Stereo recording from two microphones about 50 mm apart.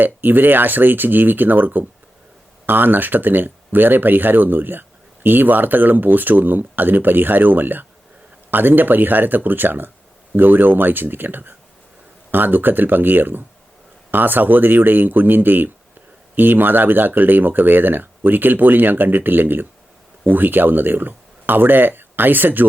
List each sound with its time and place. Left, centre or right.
0.0 s speech: right